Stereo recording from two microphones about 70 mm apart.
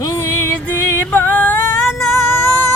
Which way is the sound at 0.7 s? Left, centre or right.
Left.